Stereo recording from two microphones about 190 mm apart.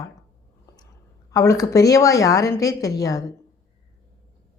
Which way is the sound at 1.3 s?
15° left (ahead or behind).